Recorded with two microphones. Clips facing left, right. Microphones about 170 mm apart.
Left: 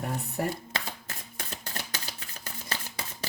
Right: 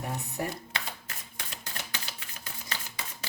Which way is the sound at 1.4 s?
40° left (ahead or behind).